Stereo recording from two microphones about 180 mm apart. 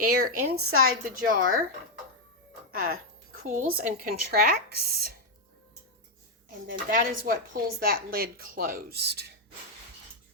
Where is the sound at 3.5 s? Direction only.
45° right (ahead or behind).